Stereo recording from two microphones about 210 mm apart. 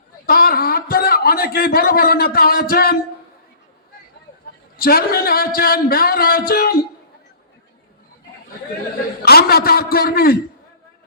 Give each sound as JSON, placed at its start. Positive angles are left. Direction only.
{"t": 0.3, "sound": "a sound", "side_deg": 45}
{"t": 4.8, "sound": "speech", "side_deg": 45}
{"t": 9.2, "sound": "speech", "side_deg": 45}